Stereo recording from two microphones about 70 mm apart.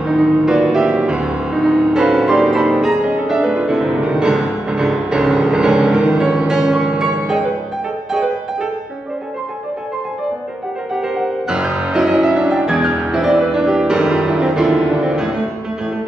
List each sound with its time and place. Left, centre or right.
0.1 s music: centre
2.9 s music: centre
3.2 s music: centre
11.1 s music: centre